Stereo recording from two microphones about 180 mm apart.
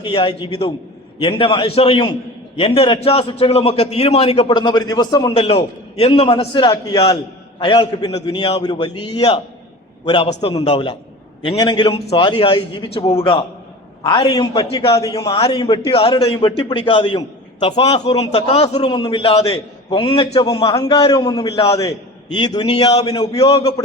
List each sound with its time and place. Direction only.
0.0 s a man's voice: 30° left (ahead or behind)
5.3 s a man's voice: 35° left (ahead or behind)
10.5 s a man's voice: 25° left (ahead or behind)
17.7 s a man's voice: 35° left (ahead or behind); by 23.5 s 20° left (ahead or behind)